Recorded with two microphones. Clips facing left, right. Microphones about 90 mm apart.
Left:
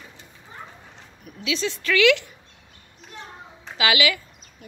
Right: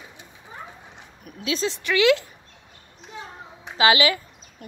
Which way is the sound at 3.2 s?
15° right (ahead or behind).